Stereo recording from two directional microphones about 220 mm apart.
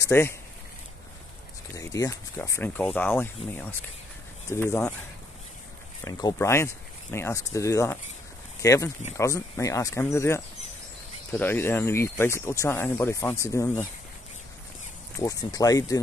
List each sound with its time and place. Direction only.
0.0 s speech: 10° left (ahead or behind)
1.8 s speech: 15° left (ahead or behind)
6.0 s speech: 15° left (ahead or behind)
15.1 s speech: 15° left (ahead or behind)